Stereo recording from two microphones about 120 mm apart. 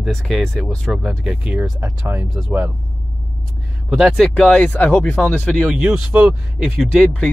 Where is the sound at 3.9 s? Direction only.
Centre (ahead or behind).